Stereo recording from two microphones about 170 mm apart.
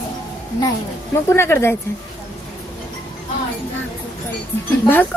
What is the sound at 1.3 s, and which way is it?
Speech, 15° left (ahead or behind).